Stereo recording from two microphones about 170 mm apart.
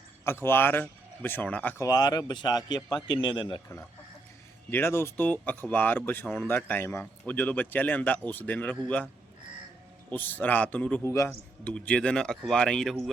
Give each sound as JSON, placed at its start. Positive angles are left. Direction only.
{"t": 0.3, "sound": "speech", "side_deg": 15}
{"t": 1.9, "sound": "speech", "side_deg": 20}
{"t": 4.7, "sound": "speech", "side_deg": 15}
{"t": 10.1, "sound": "speech", "side_deg": 10}
{"t": 11.7, "sound": "speech", "side_deg": 5}